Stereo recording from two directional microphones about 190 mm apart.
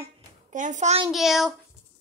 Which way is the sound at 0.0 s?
40° right (ahead or behind).